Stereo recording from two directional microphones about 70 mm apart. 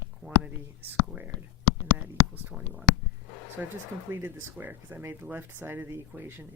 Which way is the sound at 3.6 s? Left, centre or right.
Right.